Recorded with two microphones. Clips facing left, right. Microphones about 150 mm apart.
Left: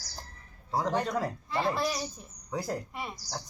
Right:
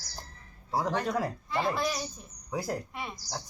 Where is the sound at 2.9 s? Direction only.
5° left (ahead or behind).